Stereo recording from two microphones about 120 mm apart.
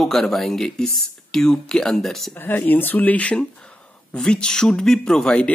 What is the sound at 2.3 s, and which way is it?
Speech, 15° left (ahead or behind).